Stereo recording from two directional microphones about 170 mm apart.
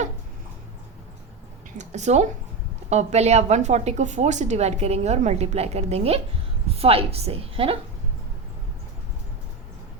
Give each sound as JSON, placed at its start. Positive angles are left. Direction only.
{"t": 1.8, "sound": "a woman's voice", "side_deg": -40}